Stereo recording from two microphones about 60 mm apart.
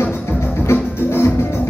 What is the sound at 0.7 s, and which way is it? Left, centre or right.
Music, left.